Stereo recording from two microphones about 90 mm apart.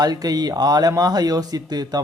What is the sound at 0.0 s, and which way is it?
A man's voice, 45° right (ahead or behind).